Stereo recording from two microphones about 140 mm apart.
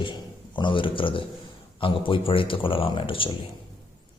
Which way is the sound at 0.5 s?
35° left (ahead or behind).